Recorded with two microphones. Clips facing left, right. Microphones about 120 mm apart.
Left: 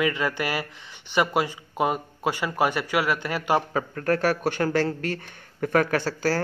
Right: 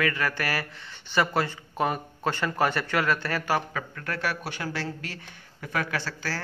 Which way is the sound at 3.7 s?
40° left (ahead or behind).